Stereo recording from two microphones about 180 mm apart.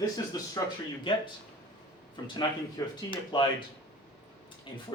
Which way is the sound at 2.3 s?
25° left (ahead or behind).